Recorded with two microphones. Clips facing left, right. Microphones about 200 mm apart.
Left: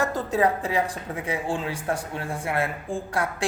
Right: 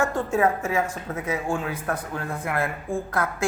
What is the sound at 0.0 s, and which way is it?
A woman's voice, 35° left (ahead or behind).